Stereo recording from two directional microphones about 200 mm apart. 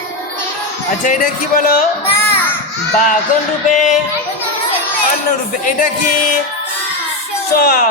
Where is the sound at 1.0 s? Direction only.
40° left (ahead or behind).